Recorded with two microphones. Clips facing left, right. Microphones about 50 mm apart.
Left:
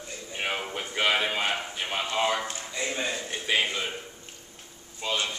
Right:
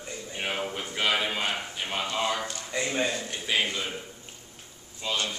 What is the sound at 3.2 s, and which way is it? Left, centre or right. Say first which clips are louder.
Speech: left 1 dB; centre.